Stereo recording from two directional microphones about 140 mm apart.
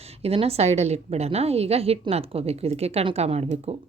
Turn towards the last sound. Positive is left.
turn(degrees=-45)  # may be behind; listen again after turning